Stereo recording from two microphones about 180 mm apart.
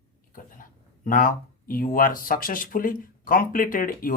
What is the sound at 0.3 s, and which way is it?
Speech, 50° left (ahead or behind).